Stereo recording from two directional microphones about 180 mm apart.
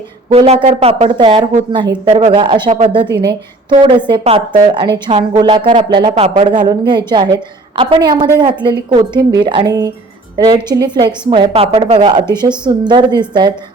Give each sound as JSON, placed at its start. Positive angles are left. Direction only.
{"t": 0.3, "sound": "a woman's voice", "side_deg": -35}